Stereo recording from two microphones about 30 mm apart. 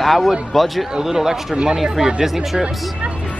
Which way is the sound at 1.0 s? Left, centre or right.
Centre.